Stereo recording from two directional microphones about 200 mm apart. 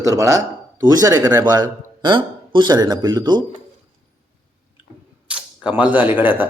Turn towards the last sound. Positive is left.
turn(degrees=-10)  # may be behind; listen again after turning